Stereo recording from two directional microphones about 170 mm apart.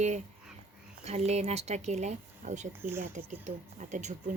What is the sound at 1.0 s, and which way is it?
Speech, 40° right (ahead or behind).